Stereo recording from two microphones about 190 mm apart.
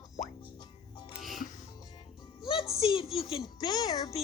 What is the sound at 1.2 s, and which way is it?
Music, centre (ahead or behind).